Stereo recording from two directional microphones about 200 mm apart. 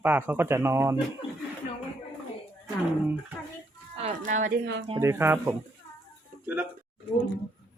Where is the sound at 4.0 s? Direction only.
35° right (ahead or behind).